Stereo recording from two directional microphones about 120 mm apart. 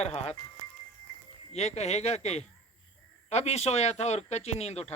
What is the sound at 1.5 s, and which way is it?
Speech, 65° left (ahead or behind).